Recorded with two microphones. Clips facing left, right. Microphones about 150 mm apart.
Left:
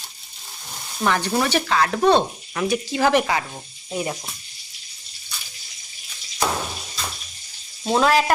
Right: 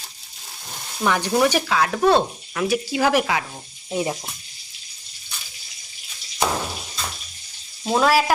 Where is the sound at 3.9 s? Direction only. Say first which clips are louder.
Right 2 dB; 20° right (ahead or behind).